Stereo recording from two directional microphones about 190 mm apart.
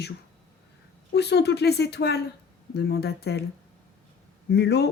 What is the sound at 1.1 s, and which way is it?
A woman's voice, 60° left (ahead or behind).